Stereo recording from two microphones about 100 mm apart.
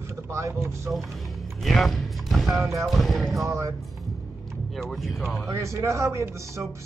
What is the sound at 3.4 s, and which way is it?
Speech, 30° right (ahead or behind).